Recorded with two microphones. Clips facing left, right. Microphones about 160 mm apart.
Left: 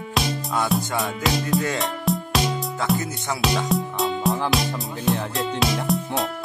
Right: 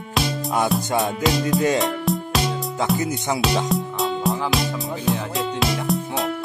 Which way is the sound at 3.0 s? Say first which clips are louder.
Right 4 dB; 20° right (ahead or behind).